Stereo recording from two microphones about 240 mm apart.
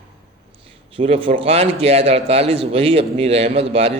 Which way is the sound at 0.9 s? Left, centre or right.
Right.